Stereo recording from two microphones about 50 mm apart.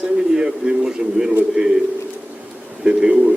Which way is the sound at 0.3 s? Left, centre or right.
Centre.